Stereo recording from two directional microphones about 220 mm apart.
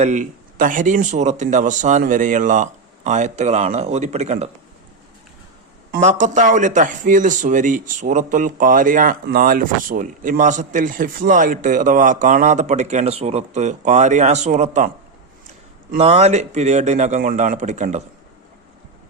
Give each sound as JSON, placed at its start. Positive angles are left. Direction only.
{"t": 0.0, "sound": "a man's voice", "side_deg": -35}
{"t": 5.9, "sound": "a man's voice", "side_deg": -35}